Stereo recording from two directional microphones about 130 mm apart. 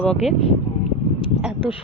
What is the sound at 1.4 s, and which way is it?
Speech, 5° right (ahead or behind).